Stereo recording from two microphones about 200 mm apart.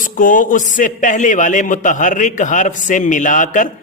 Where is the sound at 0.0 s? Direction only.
40° left (ahead or behind).